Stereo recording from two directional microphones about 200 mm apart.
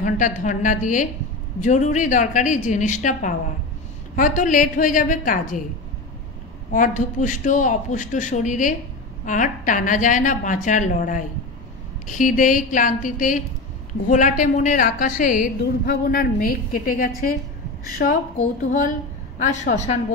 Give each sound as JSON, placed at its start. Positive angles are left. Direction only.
{"t": 0.0, "sound": "a man's voice", "side_deg": 40}
{"t": 6.7, "sound": "a man's voice", "side_deg": 40}